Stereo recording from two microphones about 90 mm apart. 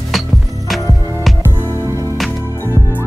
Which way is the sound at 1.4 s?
30° right (ahead or behind).